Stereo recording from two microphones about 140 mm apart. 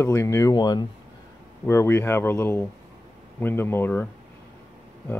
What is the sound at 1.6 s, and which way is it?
Speech, 20° left (ahead or behind).